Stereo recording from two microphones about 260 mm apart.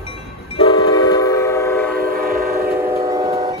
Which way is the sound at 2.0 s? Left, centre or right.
Right.